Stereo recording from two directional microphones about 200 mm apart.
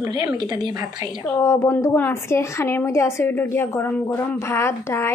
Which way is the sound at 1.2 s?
15° left (ahead or behind).